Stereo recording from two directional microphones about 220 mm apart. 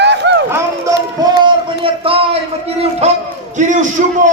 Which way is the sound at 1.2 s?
25° right (ahead or behind).